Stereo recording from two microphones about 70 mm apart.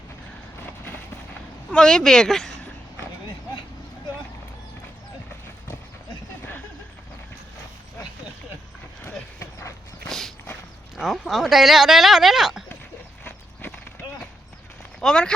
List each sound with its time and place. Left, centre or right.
1.7 s speech: centre
9.4 s dog: left
10.1 s walk: centre
10.9 s speech: centre
13.2 s horse: left
15.0 s speech: centre